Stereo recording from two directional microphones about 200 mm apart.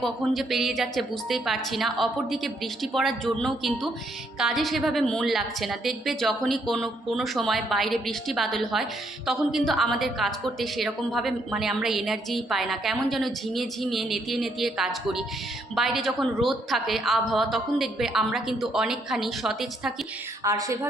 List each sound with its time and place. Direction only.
0.0 s a woman's voice: centre (ahead or behind)
20.4 s music: 15° right (ahead or behind)